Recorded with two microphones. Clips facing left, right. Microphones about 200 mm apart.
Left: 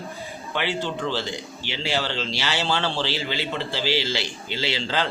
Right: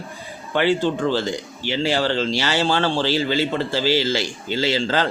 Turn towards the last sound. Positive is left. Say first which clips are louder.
# right 6 dB
turn(degrees=-45)  # may be behind; listen again after turning